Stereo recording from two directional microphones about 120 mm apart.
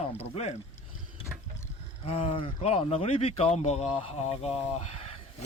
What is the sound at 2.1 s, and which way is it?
Speech, 50° left (ahead or behind).